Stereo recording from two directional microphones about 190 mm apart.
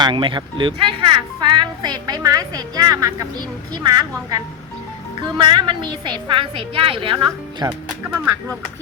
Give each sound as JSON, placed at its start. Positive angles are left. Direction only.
{"t": 0.0, "sound": "speech", "side_deg": -25}
{"t": 7.7, "sound": "speech", "side_deg": -10}